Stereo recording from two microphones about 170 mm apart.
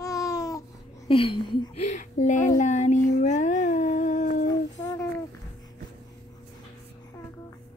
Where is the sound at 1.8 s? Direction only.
45° left (ahead or behind).